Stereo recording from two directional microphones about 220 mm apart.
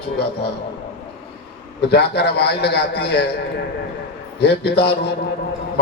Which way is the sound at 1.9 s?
50° left (ahead or behind).